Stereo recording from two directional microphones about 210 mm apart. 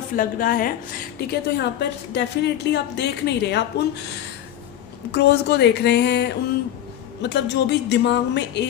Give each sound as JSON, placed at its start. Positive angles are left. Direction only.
{"t": 0.1, "sound": "a woman's voice", "side_deg": 40}
{"t": 1.3, "sound": "a woman's voice", "side_deg": 50}
{"t": 5.1, "sound": "a woman's voice", "side_deg": 50}